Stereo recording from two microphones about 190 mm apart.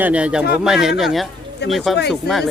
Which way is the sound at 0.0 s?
5° right (ahead or behind).